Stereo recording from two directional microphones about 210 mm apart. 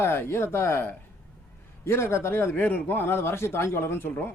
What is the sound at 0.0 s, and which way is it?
Speech, 10° left (ahead or behind).